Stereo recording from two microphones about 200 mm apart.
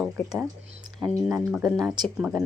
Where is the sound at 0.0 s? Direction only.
5° right (ahead or behind).